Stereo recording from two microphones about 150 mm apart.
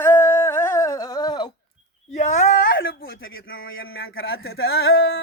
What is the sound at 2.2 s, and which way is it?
Speech, 55° left (ahead or behind).